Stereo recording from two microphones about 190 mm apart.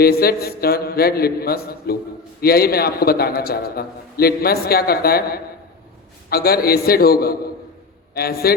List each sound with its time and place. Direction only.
0.0 s a man's voice: 55° left (ahead or behind)